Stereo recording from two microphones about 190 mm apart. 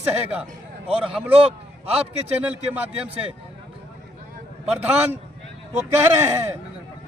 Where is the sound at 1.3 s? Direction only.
30° right (ahead or behind).